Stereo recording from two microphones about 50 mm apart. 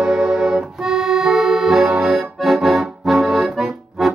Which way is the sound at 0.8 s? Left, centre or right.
Centre.